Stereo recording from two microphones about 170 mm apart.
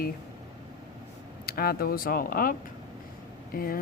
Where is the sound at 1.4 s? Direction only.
65° left (ahead or behind).